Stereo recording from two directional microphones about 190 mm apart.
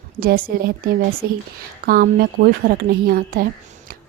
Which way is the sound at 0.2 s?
50° right (ahead or behind).